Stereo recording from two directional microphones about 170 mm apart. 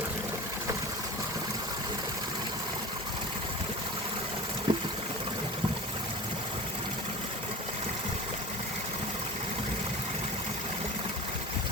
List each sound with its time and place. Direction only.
4.7 s water: 30° right (ahead or behind)